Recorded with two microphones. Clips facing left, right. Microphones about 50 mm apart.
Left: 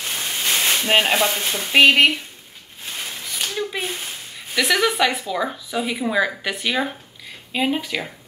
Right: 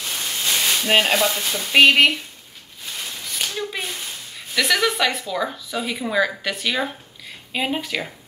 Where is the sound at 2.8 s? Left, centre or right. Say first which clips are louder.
Left 1 dB; centre.